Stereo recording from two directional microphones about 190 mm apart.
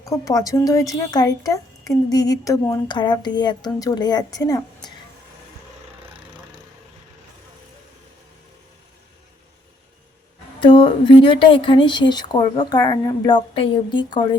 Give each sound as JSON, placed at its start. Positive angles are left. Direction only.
{"t": 0.0, "sound": "a woman's voice", "side_deg": 15}
{"t": 6.1, "sound": "a sound", "side_deg": -25}
{"t": 10.6, "sound": "a woman's voice", "side_deg": 25}